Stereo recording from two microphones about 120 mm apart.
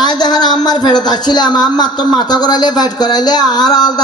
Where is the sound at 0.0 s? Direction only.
35° left (ahead or behind).